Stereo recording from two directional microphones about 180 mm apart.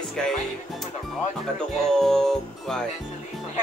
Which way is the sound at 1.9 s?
Centre (ahead or behind).